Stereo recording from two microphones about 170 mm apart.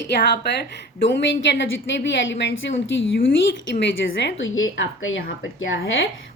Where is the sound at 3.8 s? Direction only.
90° left.